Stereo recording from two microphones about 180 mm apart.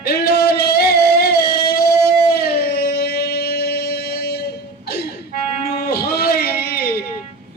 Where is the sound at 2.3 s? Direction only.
60° left (ahead or behind).